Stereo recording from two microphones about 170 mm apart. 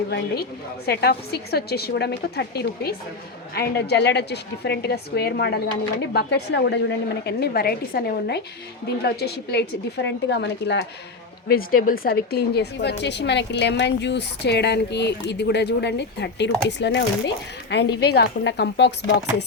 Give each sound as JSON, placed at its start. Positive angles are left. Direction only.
{"t": 0.9, "sound": "a woman's voice", "side_deg": 70}
{"t": 7.3, "sound": "a woman's voice", "side_deg": 70}
{"t": 11.4, "sound": "a woman's voice", "side_deg": 60}
{"t": 18.0, "sound": "a woman's voice", "side_deg": 70}